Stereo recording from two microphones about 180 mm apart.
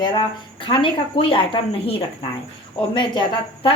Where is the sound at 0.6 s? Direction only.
25° left (ahead or behind).